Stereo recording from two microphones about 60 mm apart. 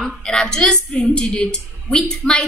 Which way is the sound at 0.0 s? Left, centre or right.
Centre.